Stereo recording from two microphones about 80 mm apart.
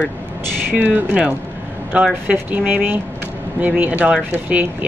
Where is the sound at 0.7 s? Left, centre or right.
Centre.